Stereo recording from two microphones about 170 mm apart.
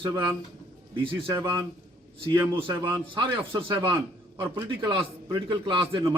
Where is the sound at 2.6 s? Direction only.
25° right (ahead or behind).